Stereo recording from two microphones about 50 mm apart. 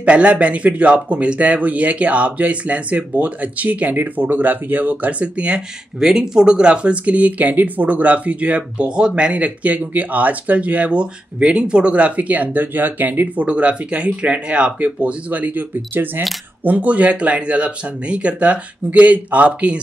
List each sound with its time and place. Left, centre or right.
0.0 s speech: right
5.9 s speech: centre